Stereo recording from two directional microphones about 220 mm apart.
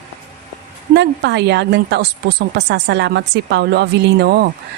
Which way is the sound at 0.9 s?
50° right (ahead or behind).